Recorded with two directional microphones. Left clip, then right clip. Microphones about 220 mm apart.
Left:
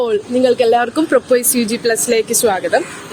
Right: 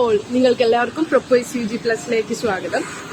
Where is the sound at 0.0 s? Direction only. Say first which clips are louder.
Left 2 dB; 30° left (ahead or behind).